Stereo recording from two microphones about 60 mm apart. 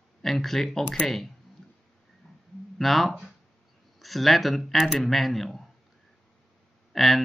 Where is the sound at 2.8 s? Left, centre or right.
Centre.